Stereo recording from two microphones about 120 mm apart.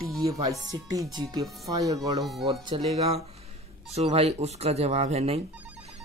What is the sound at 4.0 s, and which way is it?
Speech, 60° right (ahead or behind).